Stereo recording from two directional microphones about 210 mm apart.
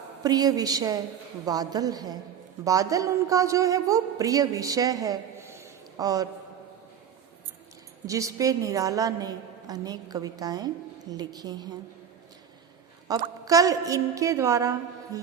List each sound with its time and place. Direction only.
0.2 s a woman's voice: 20° right (ahead or behind)
8.0 s a woman's voice: 15° right (ahead or behind)
13.1 s a woman's voice: 15° right (ahead or behind)